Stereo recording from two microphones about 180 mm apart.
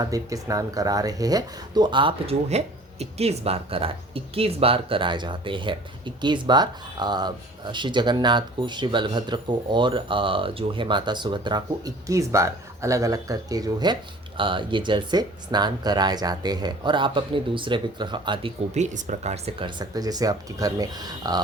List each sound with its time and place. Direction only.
0.0 s speech: 20° right (ahead or behind)
18.7 s speech: 40° right (ahead or behind); by 21.4 s 20° right (ahead or behind)